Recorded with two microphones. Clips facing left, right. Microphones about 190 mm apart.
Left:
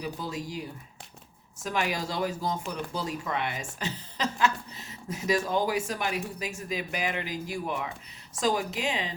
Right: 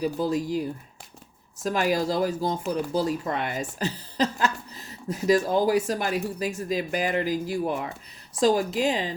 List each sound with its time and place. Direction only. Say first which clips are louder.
0.0 s speech: right 9 dB; 40° right (ahead or behind)
1.6 s speech: right 6 dB; 40° right (ahead or behind)